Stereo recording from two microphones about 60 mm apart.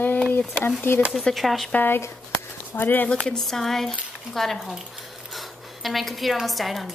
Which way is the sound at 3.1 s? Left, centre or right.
Centre.